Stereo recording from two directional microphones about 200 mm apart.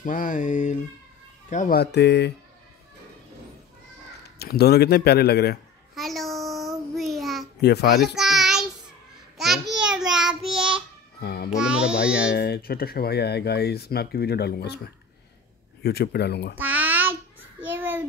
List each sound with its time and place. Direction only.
0.0 s a sound: 40° left (ahead or behind)
1.5 s speech: 45° left (ahead or behind)
4.4 s speech: 50° left (ahead or behind)
5.9 s child singing: centre (ahead or behind)
7.6 s speech: 55° left (ahead or behind)
8.2 s child singing: centre (ahead or behind)
9.8 s child singing: 5° right (ahead or behind)
11.1 s music: 55° left (ahead or behind)
11.5 s music: 5° right (ahead or behind)
12.3 s speech: 55° left (ahead or behind)
15.8 s speech: 55° left (ahead or behind)
16.5 s a sound: 10° right (ahead or behind)